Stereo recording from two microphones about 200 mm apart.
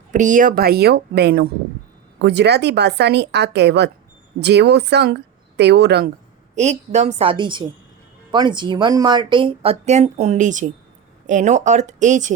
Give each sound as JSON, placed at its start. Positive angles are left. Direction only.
{"t": 0.1, "sound": "a woman's voice", "side_deg": -40}
{"t": 6.6, "sound": "speech", "side_deg": -35}